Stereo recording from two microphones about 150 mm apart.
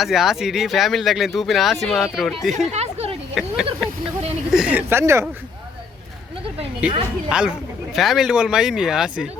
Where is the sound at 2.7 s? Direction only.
45° right (ahead or behind).